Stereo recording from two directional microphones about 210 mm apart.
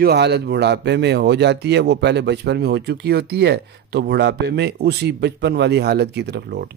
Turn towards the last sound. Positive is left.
turn(degrees=-55)  # may be behind; listen again after turning